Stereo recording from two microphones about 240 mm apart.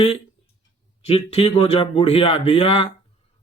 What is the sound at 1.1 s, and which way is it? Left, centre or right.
Speech, left.